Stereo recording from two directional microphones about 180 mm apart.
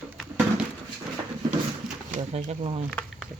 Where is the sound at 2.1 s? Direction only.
35° right (ahead or behind).